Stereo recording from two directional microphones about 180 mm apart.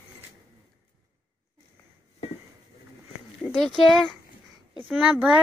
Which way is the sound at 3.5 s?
Centre (ahead or behind).